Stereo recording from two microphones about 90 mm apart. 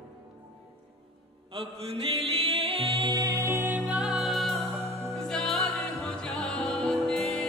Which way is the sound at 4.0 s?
5° right (ahead or behind).